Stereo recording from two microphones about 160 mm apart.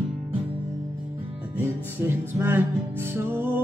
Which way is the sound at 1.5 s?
15° right (ahead or behind).